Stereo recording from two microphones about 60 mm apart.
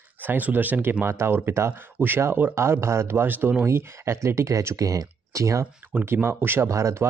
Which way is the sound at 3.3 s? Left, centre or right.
Right.